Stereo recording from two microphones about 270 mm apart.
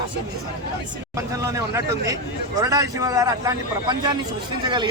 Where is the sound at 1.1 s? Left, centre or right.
Centre.